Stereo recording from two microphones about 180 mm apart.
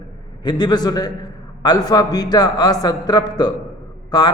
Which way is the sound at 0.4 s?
25° left (ahead or behind).